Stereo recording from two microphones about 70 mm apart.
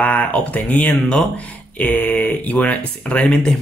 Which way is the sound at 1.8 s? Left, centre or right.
Left.